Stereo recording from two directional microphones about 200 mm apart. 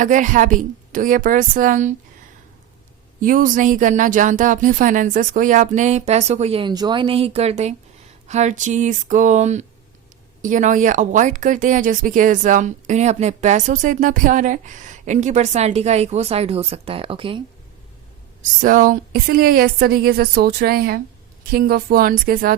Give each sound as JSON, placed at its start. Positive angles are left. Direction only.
{"t": 0.0, "sound": "speech", "side_deg": -40}
{"t": 3.2, "sound": "speech", "side_deg": -40}
{"t": 18.6, "sound": "speech", "side_deg": -40}